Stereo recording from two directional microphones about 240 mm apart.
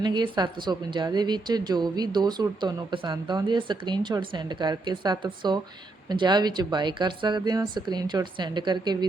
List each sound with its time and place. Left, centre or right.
0.0 s a woman's voice: centre